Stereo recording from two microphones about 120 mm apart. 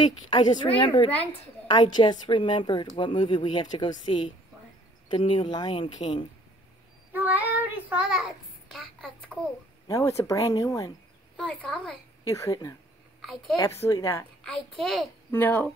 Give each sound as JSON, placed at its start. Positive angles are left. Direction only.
{"t": 0.0, "sound": "a woman's voice", "side_deg": 35}
{"t": 7.1, "sound": "child singing", "side_deg": -15}
{"t": 9.8, "sound": "speech", "side_deg": 25}
{"t": 11.3, "sound": "a woman's voice", "side_deg": 10}
{"t": 12.3, "sound": "speech", "side_deg": 30}
{"t": 13.2, "sound": "a child's voice", "side_deg": 0}
{"t": 13.7, "sound": "speech", "side_deg": 20}
{"t": 14.4, "sound": "a woman's voice", "side_deg": 5}
{"t": 15.3, "sound": "speech", "side_deg": 15}